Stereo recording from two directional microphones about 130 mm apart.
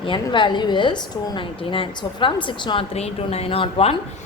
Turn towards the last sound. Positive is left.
turn(degrees=45)  # may be behind; listen again after turning